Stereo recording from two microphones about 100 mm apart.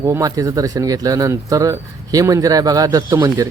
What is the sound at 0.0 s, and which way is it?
Speech, 30° right (ahead or behind).